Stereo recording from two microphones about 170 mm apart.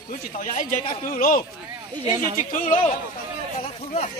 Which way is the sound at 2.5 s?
50° left (ahead or behind).